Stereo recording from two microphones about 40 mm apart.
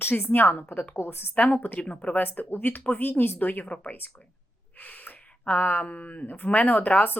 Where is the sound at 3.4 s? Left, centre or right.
Left.